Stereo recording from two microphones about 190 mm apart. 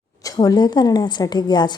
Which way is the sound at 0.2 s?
20° left (ahead or behind).